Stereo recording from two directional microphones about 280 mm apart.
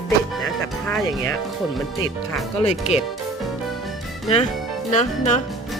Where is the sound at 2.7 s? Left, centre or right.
Left.